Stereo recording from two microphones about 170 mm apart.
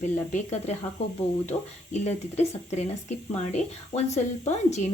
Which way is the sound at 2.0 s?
40° left (ahead or behind).